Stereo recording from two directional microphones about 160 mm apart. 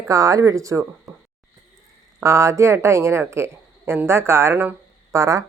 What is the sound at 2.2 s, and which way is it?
A woman's voice, 20° right (ahead or behind).